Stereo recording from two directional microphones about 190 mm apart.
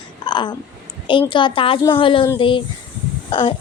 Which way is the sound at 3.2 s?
30° left (ahead or behind).